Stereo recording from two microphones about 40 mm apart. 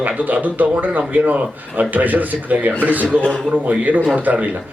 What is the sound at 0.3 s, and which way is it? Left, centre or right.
A man's voice, right.